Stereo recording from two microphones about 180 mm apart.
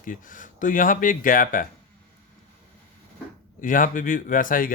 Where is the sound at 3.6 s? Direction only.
50° left (ahead or behind).